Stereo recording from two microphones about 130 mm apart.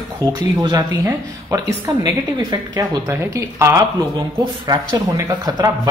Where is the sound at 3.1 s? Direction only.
20° right (ahead or behind).